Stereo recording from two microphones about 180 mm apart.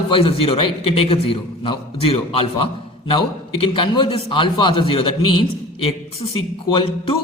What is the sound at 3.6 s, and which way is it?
A man's voice, 30° left (ahead or behind).